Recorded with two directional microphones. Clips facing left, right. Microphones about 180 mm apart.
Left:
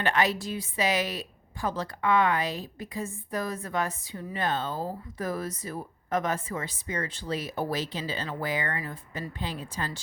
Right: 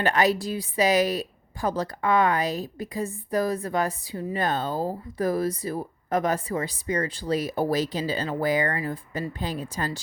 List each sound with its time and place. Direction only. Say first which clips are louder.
0.0 s a woman's voice: right 4 dB; 40° right (ahead or behind)